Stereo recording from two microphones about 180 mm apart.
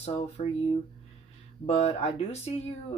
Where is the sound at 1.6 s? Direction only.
35° left (ahead or behind).